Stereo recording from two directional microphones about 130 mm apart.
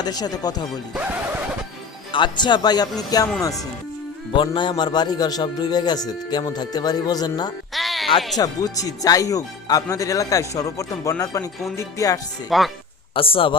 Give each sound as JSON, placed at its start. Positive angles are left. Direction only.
{"t": 0.0, "sound": "speech", "side_deg": 30}
{"t": 2.1, "sound": "speech", "side_deg": 35}
{"t": 4.4, "sound": "speech", "side_deg": 40}
{"t": 7.7, "sound": "music", "side_deg": 0}
{"t": 8.4, "sound": "speech", "side_deg": 25}
{"t": 12.5, "sound": "speech", "side_deg": 0}
{"t": 13.1, "sound": "a man's voice", "side_deg": 45}